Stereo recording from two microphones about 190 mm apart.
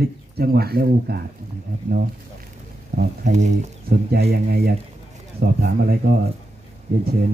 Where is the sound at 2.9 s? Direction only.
45° right (ahead or behind).